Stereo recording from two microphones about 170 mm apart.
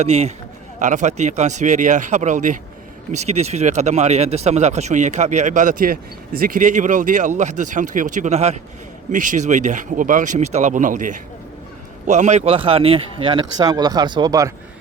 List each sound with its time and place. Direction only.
0.0 s speech: 40° right (ahead or behind); by 14.5 s 20° right (ahead or behind)